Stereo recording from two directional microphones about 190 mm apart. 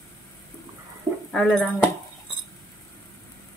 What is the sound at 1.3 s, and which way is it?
Speech, centre (ahead or behind).